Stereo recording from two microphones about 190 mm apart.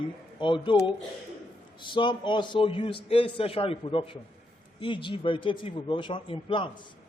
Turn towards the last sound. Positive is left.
turn(degrees=25)  # may be behind; listen again after turning